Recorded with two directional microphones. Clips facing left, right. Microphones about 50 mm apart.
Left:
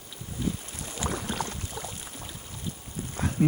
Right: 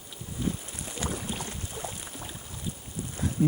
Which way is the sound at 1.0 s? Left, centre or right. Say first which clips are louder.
Left 3 dB; left.